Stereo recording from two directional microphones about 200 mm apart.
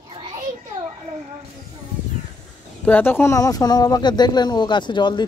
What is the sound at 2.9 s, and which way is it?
Speech, 10° left (ahead or behind).